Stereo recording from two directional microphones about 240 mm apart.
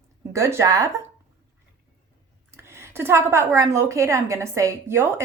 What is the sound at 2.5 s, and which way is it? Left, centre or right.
Speech, centre.